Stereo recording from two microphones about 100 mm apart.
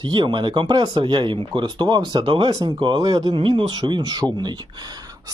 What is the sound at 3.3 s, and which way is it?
Speech, 55° right (ahead or behind).